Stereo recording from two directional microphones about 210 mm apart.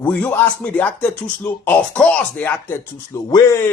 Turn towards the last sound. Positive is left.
turn(degrees=15)  # may be behind; listen again after turning